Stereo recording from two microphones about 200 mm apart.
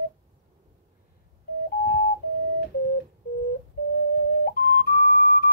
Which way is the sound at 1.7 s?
50° left (ahead or behind).